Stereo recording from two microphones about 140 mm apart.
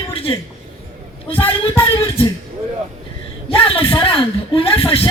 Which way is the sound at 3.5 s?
40° left (ahead or behind).